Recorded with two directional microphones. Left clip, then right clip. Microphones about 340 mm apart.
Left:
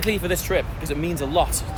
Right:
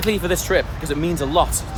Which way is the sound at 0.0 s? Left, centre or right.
Centre.